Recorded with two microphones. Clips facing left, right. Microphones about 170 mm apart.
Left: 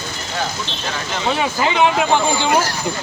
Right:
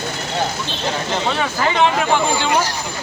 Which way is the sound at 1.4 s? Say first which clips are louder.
Left 1 dB; 10° left (ahead or behind).